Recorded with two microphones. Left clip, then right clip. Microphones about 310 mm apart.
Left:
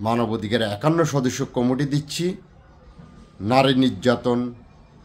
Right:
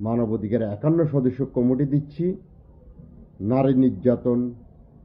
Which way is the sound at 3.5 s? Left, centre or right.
Centre.